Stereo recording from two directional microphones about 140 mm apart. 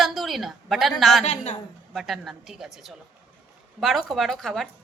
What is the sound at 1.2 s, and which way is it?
Speech, 50° left (ahead or behind).